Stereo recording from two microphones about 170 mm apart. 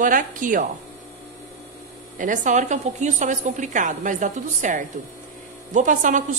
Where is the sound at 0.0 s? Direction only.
50° right (ahead or behind).